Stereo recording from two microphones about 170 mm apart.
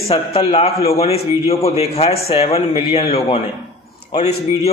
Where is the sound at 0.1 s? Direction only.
35° left (ahead or behind).